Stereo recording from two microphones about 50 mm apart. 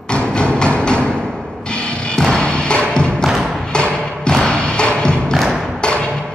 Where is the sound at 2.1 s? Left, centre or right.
Centre.